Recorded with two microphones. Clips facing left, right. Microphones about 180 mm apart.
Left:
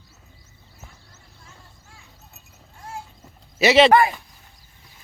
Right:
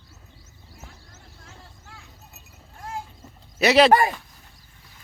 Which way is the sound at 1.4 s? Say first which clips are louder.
Right 2 dB; 65° right (ahead or behind).